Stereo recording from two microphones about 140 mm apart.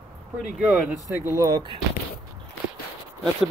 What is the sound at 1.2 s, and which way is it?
Speech, 25° right (ahead or behind).